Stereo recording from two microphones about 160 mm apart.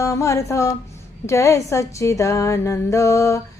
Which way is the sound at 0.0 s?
20° left (ahead or behind).